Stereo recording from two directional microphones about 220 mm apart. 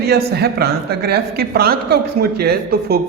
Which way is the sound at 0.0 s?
45° right (ahead or behind).